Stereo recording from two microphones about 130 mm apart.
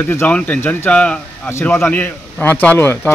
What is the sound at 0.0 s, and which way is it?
A man's voice, 15° left (ahead or behind).